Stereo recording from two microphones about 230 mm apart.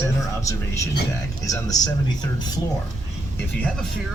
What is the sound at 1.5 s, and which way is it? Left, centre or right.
Speech, centre.